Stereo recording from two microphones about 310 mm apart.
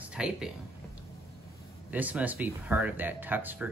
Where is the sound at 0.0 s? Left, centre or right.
Centre.